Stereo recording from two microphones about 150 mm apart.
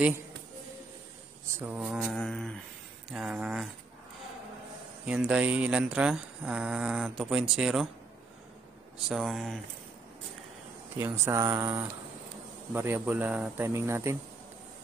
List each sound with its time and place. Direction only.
1.5 s speech: 15° right (ahead or behind)
1.8 s speech: centre (ahead or behind)
5.0 s speech: 5° right (ahead or behind)
9.1 s speech: centre (ahead or behind)
11.0 s speech: 15° right (ahead or behind)